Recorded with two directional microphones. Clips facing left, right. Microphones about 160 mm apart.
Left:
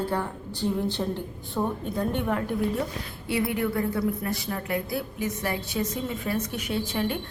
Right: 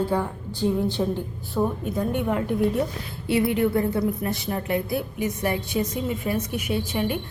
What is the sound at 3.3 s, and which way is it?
A woman's voice, 25° right (ahead or behind).